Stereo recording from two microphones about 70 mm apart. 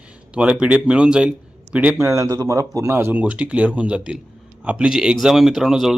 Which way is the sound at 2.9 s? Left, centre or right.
Right.